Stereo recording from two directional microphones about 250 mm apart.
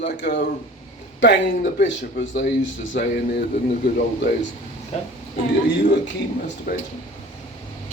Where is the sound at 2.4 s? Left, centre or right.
Left.